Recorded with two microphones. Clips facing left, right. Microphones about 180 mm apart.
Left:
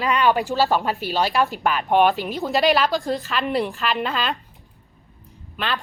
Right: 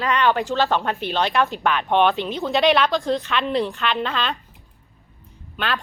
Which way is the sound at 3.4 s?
10° left (ahead or behind).